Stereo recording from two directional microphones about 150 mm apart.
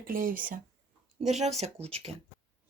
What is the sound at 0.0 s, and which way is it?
Speech, 65° right (ahead or behind).